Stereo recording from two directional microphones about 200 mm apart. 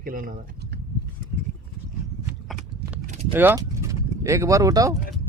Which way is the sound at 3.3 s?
10° right (ahead or behind).